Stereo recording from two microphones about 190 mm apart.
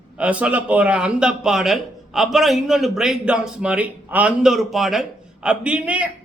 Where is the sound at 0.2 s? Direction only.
5° right (ahead or behind).